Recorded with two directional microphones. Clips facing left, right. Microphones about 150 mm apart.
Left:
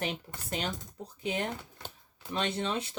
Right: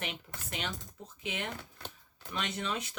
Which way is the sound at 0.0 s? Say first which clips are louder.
Left 5 dB; 35° left (ahead or behind).